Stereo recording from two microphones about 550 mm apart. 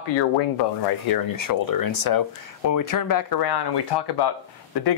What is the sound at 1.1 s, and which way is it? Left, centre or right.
Speech, left.